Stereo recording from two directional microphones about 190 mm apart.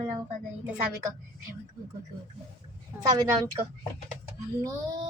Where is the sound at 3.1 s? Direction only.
20° right (ahead or behind).